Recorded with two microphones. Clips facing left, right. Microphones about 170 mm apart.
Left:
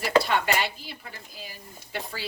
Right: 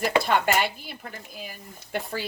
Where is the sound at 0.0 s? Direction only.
50° right (ahead or behind).